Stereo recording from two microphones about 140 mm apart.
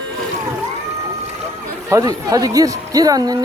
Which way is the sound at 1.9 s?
25° right (ahead or behind).